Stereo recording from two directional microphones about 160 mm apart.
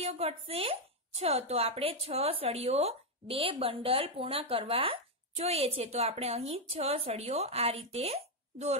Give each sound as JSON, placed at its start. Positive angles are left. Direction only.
{"t": 0.0, "sound": "speech", "side_deg": -40}